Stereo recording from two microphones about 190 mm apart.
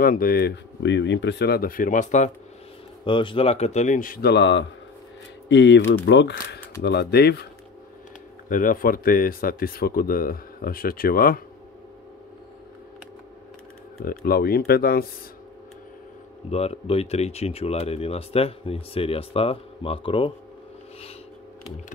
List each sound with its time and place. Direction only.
0.0 s speech: 50° left (ahead or behind)
3.1 s speech: 25° left (ahead or behind); by 7.4 s 60° left (ahead or behind)
8.5 s speech: 45° left (ahead or behind)
14.0 s speech: 50° left (ahead or behind)
16.4 s speech: 35° left (ahead or behind)